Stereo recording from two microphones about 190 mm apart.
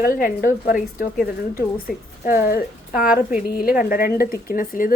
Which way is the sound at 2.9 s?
5° right (ahead or behind).